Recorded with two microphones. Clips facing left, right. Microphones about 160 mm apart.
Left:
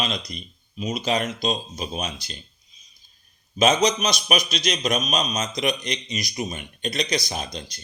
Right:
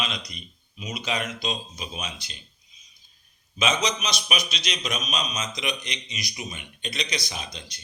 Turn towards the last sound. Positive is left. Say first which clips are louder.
# left 6 dB
turn(degrees=40)  # may be behind; listen again after turning